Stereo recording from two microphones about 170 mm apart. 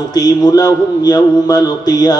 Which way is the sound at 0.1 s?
20° left (ahead or behind).